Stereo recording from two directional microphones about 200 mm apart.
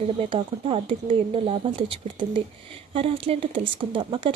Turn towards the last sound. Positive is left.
turn(degrees=-25)  # may be behind; listen again after turning